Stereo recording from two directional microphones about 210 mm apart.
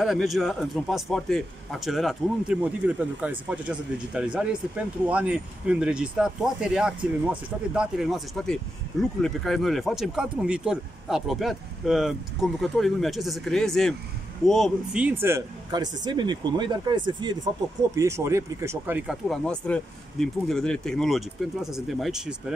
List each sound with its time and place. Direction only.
0.0 s a man's voice: centre (ahead or behind)